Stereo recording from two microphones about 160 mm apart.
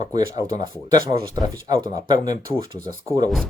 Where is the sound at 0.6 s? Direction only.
25° right (ahead or behind).